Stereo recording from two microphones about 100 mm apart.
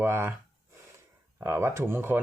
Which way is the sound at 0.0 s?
25° right (ahead or behind).